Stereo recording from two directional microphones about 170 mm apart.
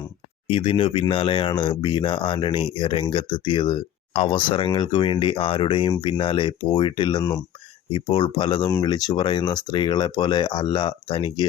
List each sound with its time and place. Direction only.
0.4 s speech: 30° left (ahead or behind)